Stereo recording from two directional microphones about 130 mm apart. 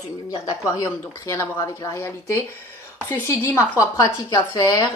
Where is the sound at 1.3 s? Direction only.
25° left (ahead or behind).